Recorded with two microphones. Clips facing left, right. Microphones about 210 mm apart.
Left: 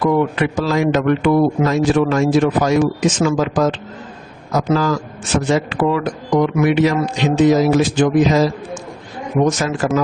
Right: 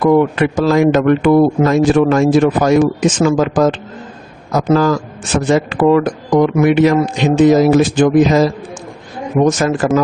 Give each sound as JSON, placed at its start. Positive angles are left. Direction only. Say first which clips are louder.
{"t": 0.0, "sound": "speech", "louder": "right 5 dB", "side_deg": -50}
{"t": 5.5, "sound": "speech", "louder": "right 6 dB", "side_deg": -50}
{"t": 9.6, "sound": "speech", "louder": "right 4 dB", "side_deg": -55}